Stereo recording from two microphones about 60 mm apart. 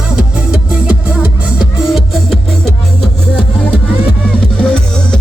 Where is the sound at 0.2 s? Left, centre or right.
Centre.